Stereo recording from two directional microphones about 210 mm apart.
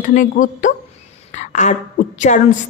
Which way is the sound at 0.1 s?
40° left (ahead or behind).